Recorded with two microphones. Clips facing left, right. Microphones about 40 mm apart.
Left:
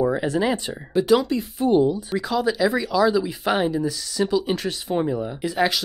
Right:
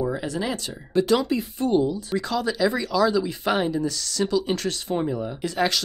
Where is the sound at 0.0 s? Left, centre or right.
Left.